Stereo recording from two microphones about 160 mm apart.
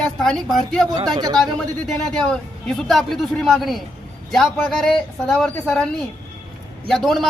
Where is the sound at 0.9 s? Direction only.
25° right (ahead or behind).